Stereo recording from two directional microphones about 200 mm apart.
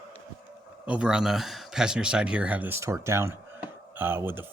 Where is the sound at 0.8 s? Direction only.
5° right (ahead or behind).